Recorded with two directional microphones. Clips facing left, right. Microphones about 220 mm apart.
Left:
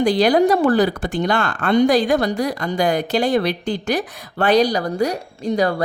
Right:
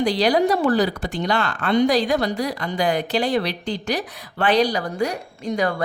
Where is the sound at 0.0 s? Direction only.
50° left (ahead or behind).